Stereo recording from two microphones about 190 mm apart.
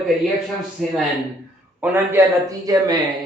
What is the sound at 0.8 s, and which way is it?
Speech, centre (ahead or behind).